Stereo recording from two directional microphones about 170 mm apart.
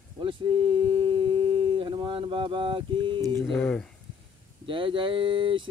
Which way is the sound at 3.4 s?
5° left (ahead or behind).